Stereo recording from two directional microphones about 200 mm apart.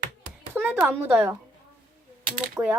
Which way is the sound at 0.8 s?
10° right (ahead or behind).